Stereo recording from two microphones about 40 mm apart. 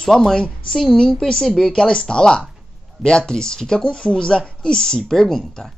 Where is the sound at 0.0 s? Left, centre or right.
Centre.